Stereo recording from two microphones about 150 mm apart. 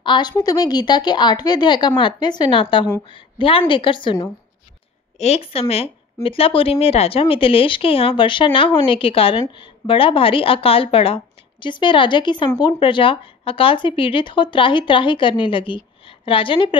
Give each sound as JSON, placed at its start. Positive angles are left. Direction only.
{"t": 0.0, "sound": "a woman's voice", "side_deg": 30}